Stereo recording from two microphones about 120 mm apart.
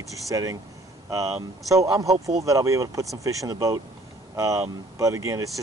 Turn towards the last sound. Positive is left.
turn(degrees=-25)  # may be behind; listen again after turning